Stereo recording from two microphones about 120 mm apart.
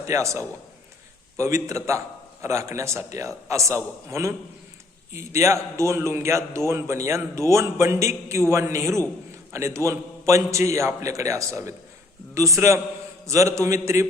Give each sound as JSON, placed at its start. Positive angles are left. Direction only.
{"t": 0.0, "sound": "a man's voice", "side_deg": -25}